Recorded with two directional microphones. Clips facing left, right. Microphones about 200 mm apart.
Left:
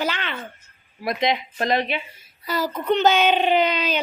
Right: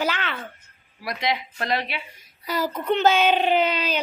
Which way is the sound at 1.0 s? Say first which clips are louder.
Left 4 dB; 20° left (ahead or behind).